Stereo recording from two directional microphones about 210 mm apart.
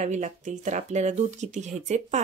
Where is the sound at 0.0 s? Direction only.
35° right (ahead or behind).